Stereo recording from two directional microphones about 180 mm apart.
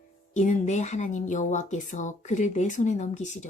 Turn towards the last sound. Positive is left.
turn(degrees=40)  # may be behind; listen again after turning